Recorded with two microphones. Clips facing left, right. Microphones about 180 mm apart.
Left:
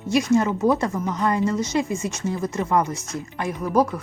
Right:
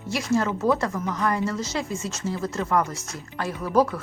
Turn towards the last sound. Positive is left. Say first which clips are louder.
# left 1 dB
turn(degrees=10)  # may be behind; listen again after turning